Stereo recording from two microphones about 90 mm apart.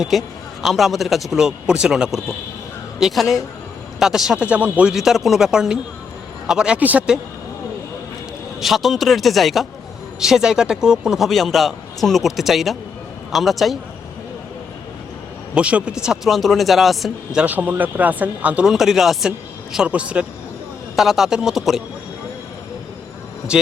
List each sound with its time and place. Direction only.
0.0 s a man's voice: centre (ahead or behind)
4.9 s a man's voice: 5° right (ahead or behind)
8.6 s a man's voice: centre (ahead or behind)
15.5 s speech: 10° right (ahead or behind)
16.0 s a man's voice: centre (ahead or behind)
17.4 s speech: 15° right (ahead or behind)
18.7 s a man's voice: 5° right (ahead or behind)
20.9 s a man's voice: centre (ahead or behind)
23.5 s speech: 10° right (ahead or behind)